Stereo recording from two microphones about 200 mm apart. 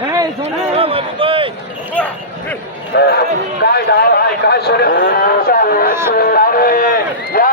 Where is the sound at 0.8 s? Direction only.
25° right (ahead or behind).